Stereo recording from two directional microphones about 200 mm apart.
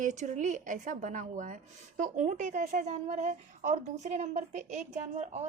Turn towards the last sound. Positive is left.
turn(degrees=-35)  # may be behind; listen again after turning